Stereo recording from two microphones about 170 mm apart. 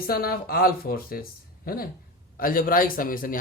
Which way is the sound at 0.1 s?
60° left (ahead or behind).